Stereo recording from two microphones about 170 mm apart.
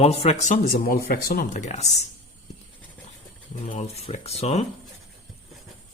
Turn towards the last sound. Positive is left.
turn(degrees=40)  # may be behind; listen again after turning